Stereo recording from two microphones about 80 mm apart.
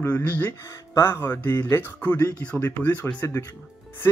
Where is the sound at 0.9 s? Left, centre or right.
Left.